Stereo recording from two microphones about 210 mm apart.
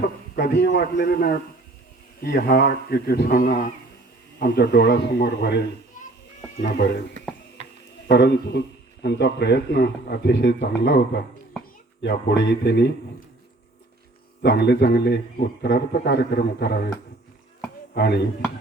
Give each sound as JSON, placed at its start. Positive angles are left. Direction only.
{"t": 0.3, "sound": "a man's voice", "side_deg": 55}
{"t": 0.7, "sound": "speech", "side_deg": 40}
{"t": 8.1, "sound": "speech", "side_deg": 55}
{"t": 14.4, "sound": "speech", "side_deg": 55}
{"t": 17.9, "sound": "speech", "side_deg": 50}